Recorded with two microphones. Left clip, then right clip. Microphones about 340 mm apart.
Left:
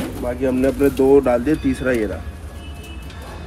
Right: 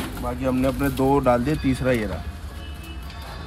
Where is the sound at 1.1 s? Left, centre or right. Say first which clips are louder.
Left 2 dB; right.